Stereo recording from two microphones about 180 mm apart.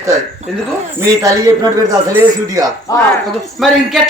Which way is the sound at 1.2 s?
20° right (ahead or behind).